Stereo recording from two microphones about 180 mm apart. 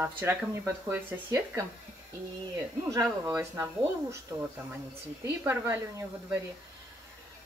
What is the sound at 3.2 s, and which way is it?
Speech, 15° right (ahead or behind).